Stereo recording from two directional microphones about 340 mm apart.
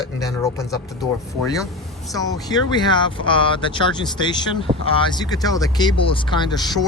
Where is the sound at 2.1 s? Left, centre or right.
Centre.